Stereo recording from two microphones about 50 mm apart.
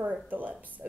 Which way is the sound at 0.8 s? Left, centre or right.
Right.